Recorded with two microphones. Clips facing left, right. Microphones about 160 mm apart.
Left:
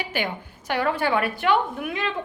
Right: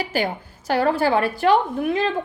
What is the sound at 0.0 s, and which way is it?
A woman's voice, 35° right (ahead or behind).